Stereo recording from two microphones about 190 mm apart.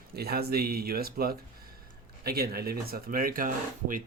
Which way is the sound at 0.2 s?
55° right (ahead or behind).